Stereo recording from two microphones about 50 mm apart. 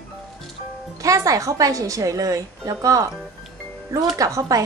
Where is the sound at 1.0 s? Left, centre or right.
Right.